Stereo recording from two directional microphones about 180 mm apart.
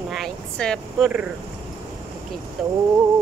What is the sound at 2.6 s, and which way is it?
Speech, centre (ahead or behind).